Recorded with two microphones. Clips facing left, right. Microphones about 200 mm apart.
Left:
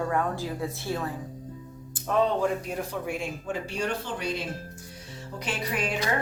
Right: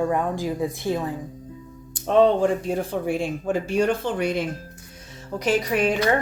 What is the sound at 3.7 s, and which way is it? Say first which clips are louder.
Speech: right 10 dB; 50° right (ahead or behind).